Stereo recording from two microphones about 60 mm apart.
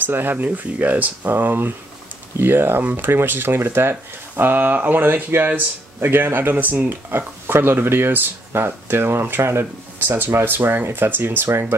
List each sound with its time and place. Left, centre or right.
0.0 s speech: right